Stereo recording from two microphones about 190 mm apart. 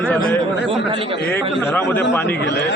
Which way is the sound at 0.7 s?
30° right (ahead or behind).